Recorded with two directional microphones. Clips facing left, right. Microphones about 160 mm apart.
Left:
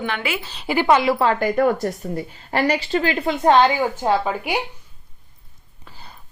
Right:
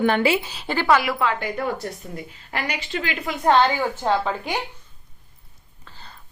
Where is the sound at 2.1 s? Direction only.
35° left (ahead or behind); by 4.6 s 10° left (ahead or behind).